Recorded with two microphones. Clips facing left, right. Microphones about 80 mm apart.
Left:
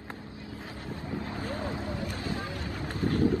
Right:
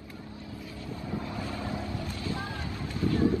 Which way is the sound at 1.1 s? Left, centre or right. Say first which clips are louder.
Even; left.